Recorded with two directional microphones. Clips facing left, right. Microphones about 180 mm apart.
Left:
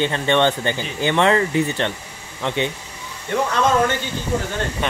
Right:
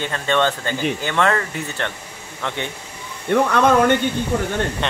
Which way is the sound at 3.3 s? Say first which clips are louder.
Right 4 dB; 60° right (ahead or behind).